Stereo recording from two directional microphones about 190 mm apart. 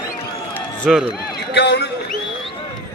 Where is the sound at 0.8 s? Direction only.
Centre (ahead or behind).